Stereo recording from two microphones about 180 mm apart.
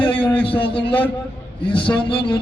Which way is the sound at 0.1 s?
10° left (ahead or behind).